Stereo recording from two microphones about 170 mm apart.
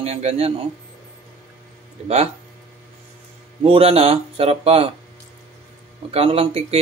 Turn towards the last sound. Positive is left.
turn(degrees=-35)  # may be behind; listen again after turning